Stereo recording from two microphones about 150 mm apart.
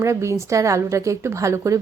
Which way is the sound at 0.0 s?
20° right (ahead or behind).